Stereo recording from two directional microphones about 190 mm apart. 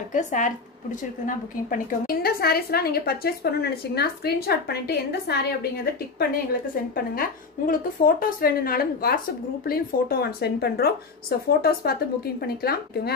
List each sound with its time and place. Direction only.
0.1 s a woman's voice: 40° left (ahead or behind); by 5.7 s 60° left (ahead or behind)
7.2 s a woman's voice: 50° left (ahead or behind)